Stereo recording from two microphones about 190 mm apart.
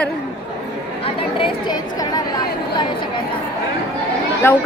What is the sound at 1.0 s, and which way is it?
Chatter, 30° left (ahead or behind).